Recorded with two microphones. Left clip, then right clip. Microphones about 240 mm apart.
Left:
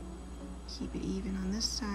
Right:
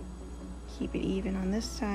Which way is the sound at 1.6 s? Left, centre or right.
Centre.